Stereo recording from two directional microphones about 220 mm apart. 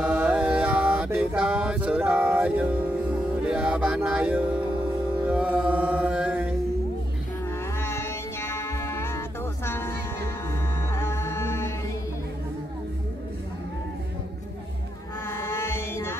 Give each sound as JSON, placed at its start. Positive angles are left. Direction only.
{"t": 0.0, "sound": "mantra", "side_deg": -5}
{"t": 3.4, "sound": "music", "side_deg": -5}
{"t": 5.3, "sound": "mantra", "side_deg": -5}
{"t": 7.8, "sound": "music", "side_deg": 10}
{"t": 15.2, "sound": "chant", "side_deg": 10}